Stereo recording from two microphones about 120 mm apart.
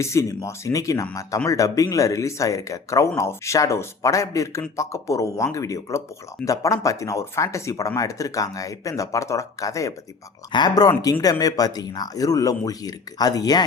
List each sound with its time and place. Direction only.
0.0 s speech: 25° left (ahead or behind)